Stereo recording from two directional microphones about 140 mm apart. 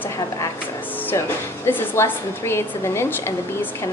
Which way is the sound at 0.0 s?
20° left (ahead or behind).